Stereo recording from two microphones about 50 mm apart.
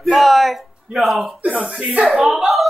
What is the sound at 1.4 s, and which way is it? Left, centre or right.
Speech, right.